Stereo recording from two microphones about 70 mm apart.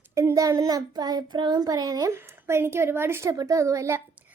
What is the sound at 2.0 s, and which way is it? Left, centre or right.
Speech, right.